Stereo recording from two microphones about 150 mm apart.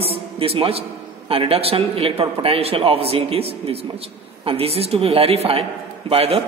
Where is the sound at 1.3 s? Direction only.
40° right (ahead or behind).